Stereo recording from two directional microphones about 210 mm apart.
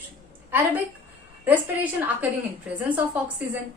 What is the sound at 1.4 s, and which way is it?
A woman's voice, 10° right (ahead or behind).